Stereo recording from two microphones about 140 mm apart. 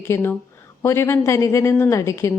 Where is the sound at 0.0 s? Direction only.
15° left (ahead or behind).